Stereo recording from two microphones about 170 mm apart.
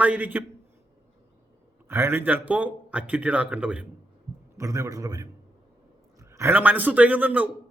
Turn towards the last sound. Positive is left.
turn(degrees=-10)  # may be behind; listen again after turning